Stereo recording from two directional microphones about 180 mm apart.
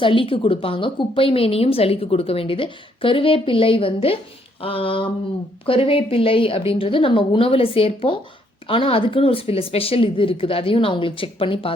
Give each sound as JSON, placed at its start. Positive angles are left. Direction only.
{"t": 0.0, "sound": "speech", "side_deg": 30}
{"t": 4.6, "sound": "a sound", "side_deg": 30}
{"t": 5.6, "sound": "speech", "side_deg": 30}